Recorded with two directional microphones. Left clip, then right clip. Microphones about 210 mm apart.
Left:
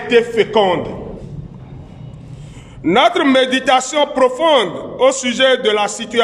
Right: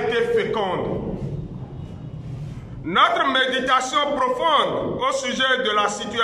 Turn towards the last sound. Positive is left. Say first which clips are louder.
# left 5 dB
turn(degrees=40)  # may be behind; listen again after turning